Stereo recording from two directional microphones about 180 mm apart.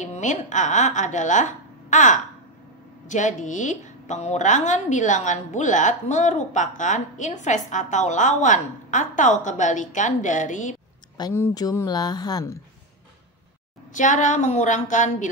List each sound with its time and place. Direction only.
0.0 s a woman's voice: 40° left (ahead or behind)
11.1 s speech: 20° left (ahead or behind)
13.9 s a woman's voice: 45° left (ahead or behind)